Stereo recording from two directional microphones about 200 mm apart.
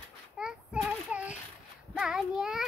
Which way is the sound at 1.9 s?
Centre (ahead or behind).